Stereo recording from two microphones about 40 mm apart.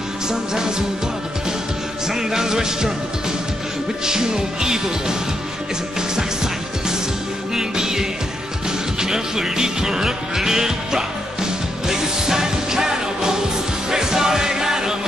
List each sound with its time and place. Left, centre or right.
0.3 s music: centre
2.0 s music: centre
4.0 s music: centre